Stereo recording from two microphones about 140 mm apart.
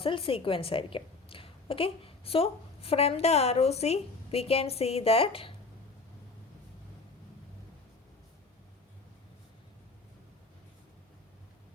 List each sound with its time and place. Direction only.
0.0 s a woman's voice: 40° left (ahead or behind)